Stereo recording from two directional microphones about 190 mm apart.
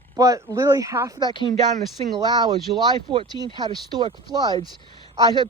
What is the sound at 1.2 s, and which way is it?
Speech, 25° left (ahead or behind).